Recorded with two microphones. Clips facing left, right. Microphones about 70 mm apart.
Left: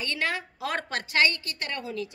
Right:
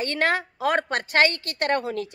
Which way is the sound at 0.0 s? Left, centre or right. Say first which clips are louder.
Right 6 dB; right.